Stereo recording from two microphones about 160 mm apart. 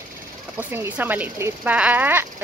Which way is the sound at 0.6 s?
15° right (ahead or behind).